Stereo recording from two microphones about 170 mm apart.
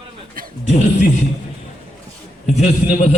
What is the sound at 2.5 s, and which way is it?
Speech, 40° left (ahead or behind).